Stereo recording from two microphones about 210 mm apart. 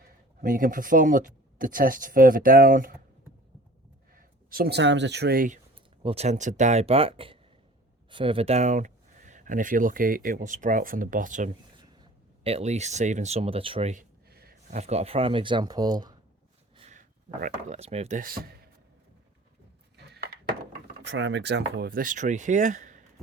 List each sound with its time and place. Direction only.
0.4 s speech: 40° right (ahead or behind)
4.1 s speech: 45° right (ahead or behind)
6.0 s speech: 30° right (ahead or behind)
13.9 s a sound: 45° right (ahead or behind)
14.8 s speech: 30° right (ahead or behind)
16.7 s a sound: 30° right (ahead or behind)
17.4 s speech: 30° right (ahead or behind)
20.0 s a sound: 50° right (ahead or behind)
21.0 s speech: 60° right (ahead or behind); by 23.0 s 35° right (ahead or behind)